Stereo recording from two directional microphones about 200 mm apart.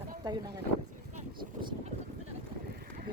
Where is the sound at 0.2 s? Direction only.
20° right (ahead or behind).